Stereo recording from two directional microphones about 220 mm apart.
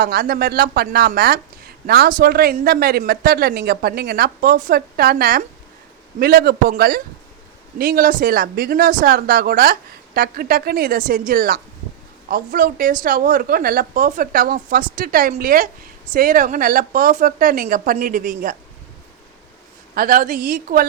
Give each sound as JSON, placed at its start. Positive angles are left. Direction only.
{"t": 0.0, "sound": "a woman's voice", "side_deg": -45}
{"t": 19.9, "sound": "a woman's voice", "side_deg": -40}